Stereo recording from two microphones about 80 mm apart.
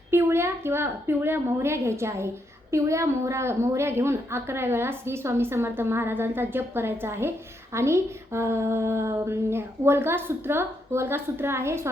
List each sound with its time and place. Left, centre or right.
0.1 s a woman's voice: right